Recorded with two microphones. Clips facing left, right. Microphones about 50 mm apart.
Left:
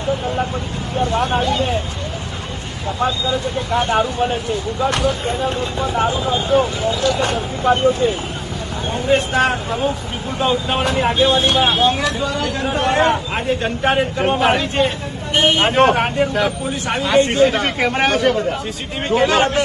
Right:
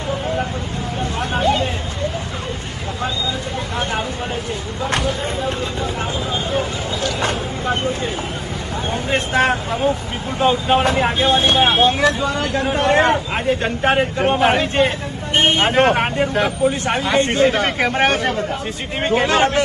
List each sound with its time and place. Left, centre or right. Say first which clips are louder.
1.1 s vehicle: left 6 dB; left
3.7 s speech: left 7 dB; left
5.0 s speech: left 3 dB; left
8.9 s speech: left 4 dB; right